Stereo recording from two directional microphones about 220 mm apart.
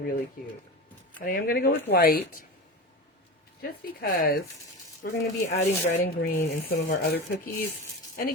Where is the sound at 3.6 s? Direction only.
45° left (ahead or behind).